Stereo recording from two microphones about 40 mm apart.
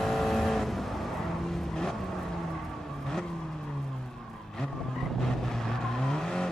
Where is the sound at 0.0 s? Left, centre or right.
Centre.